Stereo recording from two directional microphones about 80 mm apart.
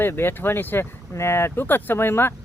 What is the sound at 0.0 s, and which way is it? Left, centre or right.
Speech, left.